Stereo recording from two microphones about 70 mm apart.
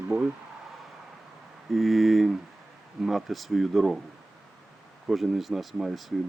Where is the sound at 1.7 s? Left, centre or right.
Centre.